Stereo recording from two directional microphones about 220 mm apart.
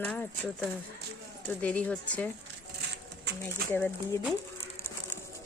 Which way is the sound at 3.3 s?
50° right (ahead or behind).